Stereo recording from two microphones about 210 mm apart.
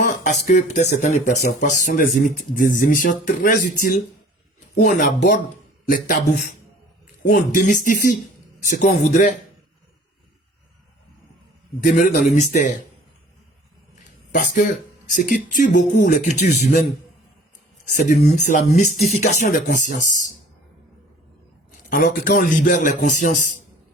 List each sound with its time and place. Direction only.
0.2 s speech: 35° left (ahead or behind)
11.9 s speech: 35° left (ahead or behind)
15.1 s speech: 40° left (ahead or behind)
17.9 s speech: 30° left (ahead or behind)
21.8 s speech: 40° left (ahead or behind)